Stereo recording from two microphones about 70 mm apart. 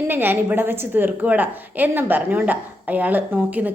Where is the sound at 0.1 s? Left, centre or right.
Right.